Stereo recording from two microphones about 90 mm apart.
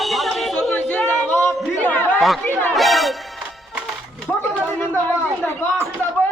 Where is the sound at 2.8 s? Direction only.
Centre (ahead or behind).